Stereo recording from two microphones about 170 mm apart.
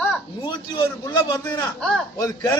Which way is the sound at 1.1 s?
15° left (ahead or behind).